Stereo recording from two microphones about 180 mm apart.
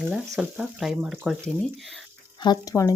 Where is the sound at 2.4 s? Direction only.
20° left (ahead or behind).